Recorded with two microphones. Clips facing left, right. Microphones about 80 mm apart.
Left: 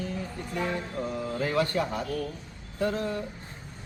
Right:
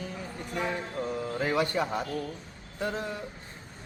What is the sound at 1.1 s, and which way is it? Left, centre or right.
Music, centre.